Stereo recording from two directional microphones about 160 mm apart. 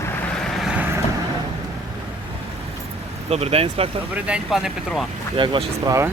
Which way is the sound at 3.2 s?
40° right (ahead or behind).